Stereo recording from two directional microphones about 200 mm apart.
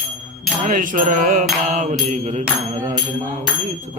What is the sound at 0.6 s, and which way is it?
Mantra, 40° right (ahead or behind).